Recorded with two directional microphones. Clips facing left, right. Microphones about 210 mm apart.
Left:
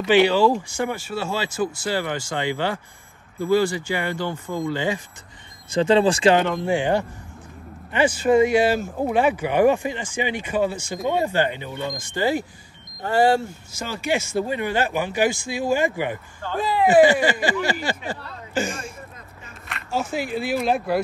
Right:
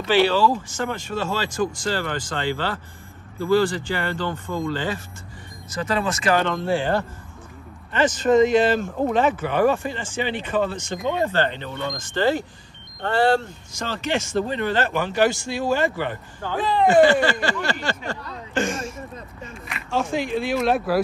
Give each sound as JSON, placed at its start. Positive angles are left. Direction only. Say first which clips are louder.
{"t": 0.0, "sound": "speech", "louder": "left 2 dB", "side_deg": 15}
{"t": 5.7, "sound": "speech", "louder": "left 7 dB", "side_deg": 30}
{"t": 6.4, "sound": "speech", "louder": "left 1 dB", "side_deg": 15}